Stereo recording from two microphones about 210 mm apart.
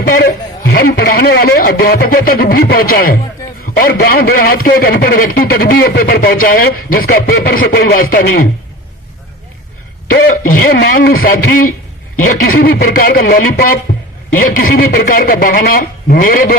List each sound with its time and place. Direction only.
0.0 s a man's voice: 45° left (ahead or behind)
10.1 s a man's voice: 40° left (ahead or behind)